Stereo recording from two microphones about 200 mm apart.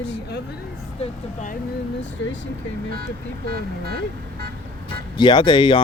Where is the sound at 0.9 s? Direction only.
35° left (ahead or behind).